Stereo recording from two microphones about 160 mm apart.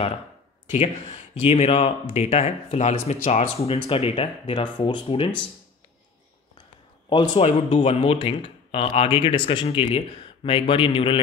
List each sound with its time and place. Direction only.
0.7 s speech: 35° left (ahead or behind)
7.1 s speech: 30° left (ahead or behind)